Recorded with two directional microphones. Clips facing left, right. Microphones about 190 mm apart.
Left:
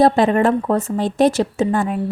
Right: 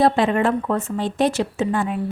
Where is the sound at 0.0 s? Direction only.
40° left (ahead or behind).